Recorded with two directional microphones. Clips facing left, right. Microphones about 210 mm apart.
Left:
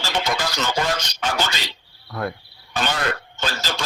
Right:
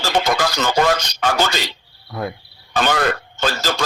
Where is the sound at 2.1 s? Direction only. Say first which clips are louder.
Right 1 dB; 15° right (ahead or behind).